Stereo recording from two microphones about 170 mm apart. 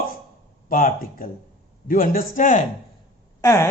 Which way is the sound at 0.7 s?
55° left (ahead or behind).